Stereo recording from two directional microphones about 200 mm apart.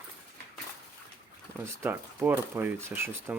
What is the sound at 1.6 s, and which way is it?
Speech, 10° right (ahead or behind).